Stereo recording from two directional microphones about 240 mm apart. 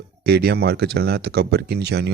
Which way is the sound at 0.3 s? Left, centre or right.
Right.